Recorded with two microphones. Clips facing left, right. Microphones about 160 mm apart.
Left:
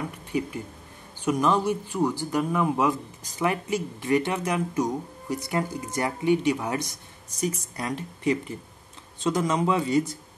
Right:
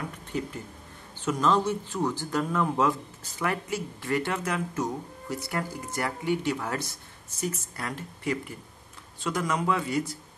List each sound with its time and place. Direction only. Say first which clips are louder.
0.3 s speech: left 5 dB; 15° left (ahead or behind)